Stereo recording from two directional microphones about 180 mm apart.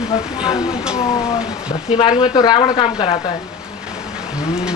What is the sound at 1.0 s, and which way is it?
Speech, 20° left (ahead or behind).